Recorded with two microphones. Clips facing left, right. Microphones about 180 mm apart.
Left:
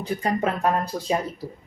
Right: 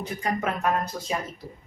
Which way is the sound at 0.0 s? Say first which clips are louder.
Left 4 dB; 30° left (ahead or behind).